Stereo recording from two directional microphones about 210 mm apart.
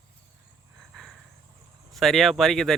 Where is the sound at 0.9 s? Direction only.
Centre (ahead or behind).